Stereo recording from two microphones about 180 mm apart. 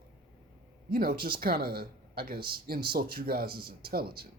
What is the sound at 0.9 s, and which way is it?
Speech, 55° right (ahead or behind).